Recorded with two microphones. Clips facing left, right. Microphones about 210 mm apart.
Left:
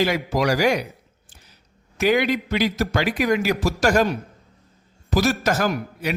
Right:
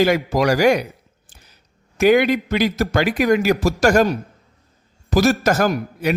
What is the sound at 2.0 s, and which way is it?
A man's voice, 50° right (ahead or behind).